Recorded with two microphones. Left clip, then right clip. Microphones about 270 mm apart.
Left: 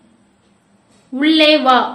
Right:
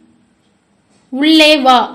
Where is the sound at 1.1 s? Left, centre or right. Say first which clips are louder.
Right 3 dB; right.